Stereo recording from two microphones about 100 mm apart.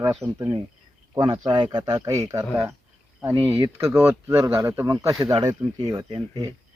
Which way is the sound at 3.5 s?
35° right (ahead or behind).